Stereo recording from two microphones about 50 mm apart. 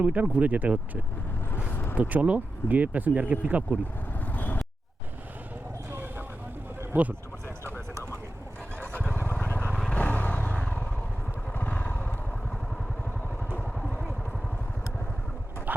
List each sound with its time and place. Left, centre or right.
0.0 s speech: right
1.7 s a sound: left
2.0 s speech: right
4.3 s vehicle: left
6.9 s speech: right
8.8 s vehicle: left
9.7 s vehicle: centre
10.0 s vehicle: left
11.5 s motorcycle: left